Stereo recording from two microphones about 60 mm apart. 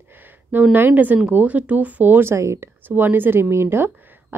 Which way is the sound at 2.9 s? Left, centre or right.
Right.